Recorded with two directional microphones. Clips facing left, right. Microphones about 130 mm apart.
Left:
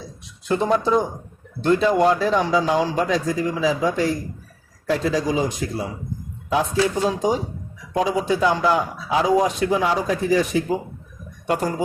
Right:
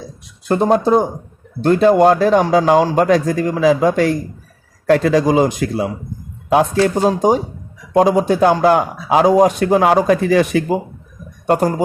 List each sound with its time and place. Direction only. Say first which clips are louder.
0.4 s a man's voice: right 6 dB; 50° right (ahead or behind); by 5.9 s 80° right
6.5 s a man's voice: right 6 dB; 65° right (ahead or behind)
11.4 s speech: right 7 dB; 55° right (ahead or behind)